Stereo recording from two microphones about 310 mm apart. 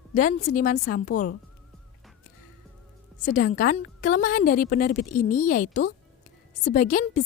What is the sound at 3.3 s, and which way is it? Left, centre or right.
A woman's voice, left.